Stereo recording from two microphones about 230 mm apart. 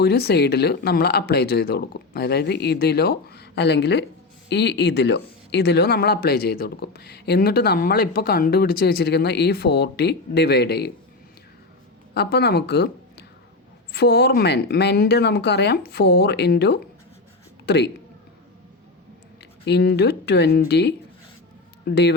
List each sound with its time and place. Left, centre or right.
0.0 s speech: left
12.1 s speech: left
19.6 s speech: left